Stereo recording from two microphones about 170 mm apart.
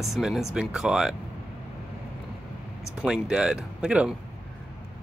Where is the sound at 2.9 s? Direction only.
5° right (ahead or behind).